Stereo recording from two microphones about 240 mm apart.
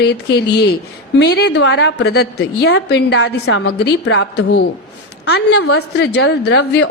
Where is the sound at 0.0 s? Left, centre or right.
Left.